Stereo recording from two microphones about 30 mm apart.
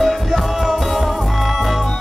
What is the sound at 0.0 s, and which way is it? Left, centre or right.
Music, centre.